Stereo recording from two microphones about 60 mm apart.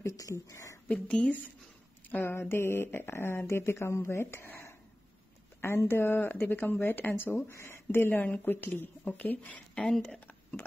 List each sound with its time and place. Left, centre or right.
0.0 s speech: left
1.0 s speech: centre
2.0 s speech: left
7.5 s speech: left